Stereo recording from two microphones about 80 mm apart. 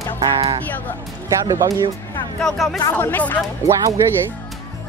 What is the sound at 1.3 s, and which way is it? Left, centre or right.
Speech, right.